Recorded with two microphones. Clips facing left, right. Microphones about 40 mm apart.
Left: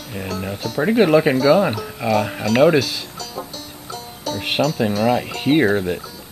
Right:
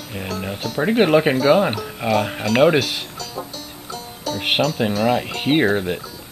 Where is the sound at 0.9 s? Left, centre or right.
Right.